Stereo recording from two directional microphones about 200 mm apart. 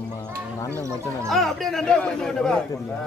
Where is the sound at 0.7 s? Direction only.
15° right (ahead or behind).